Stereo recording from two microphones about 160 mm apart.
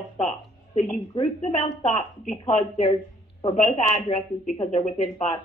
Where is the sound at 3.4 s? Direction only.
30° left (ahead or behind).